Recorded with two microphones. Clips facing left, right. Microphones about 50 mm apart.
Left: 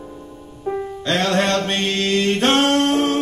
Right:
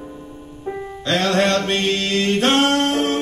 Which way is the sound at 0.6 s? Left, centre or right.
Centre.